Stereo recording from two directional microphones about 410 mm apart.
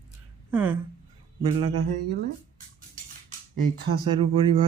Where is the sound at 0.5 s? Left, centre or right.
Centre.